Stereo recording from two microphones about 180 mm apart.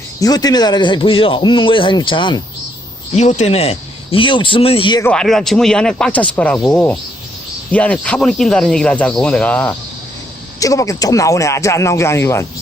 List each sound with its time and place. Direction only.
0.2 s a man's voice: 20° left (ahead or behind)
3.2 s speech: 40° left (ahead or behind)
5.0 s speech: 5° left (ahead or behind)
10.6 s speech: 20° left (ahead or behind)